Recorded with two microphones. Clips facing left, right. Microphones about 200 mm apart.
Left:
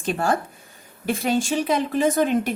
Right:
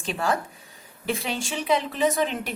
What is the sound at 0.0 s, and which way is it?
A woman's voice, 50° left (ahead or behind).